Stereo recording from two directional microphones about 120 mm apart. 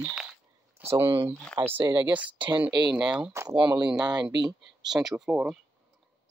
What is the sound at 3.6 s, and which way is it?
Speech, 35° right (ahead or behind).